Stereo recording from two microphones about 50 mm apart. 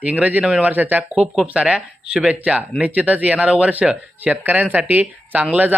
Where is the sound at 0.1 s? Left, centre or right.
Right.